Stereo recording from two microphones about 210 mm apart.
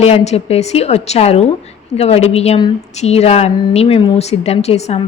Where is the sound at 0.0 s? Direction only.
30° left (ahead or behind).